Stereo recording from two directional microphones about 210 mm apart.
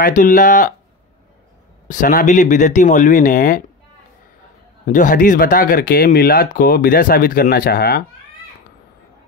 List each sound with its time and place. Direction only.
0.0 s speech: 40° left (ahead or behind)
1.9 s speech: 40° left (ahead or behind)
4.8 s speech: 40° left (ahead or behind)